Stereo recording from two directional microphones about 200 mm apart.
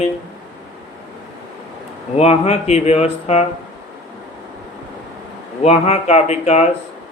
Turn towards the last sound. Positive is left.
turn(degrees=35)  # may be behind; listen again after turning